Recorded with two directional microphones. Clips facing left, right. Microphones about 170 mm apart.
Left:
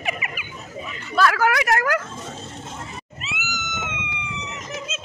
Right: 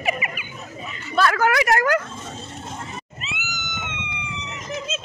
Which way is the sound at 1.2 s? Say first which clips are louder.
Even; 5° left (ahead or behind).